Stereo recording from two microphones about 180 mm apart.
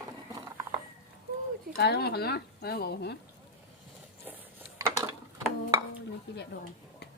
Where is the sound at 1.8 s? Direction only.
65° left (ahead or behind).